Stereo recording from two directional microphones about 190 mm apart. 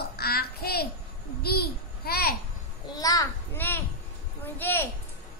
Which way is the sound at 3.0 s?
20° left (ahead or behind).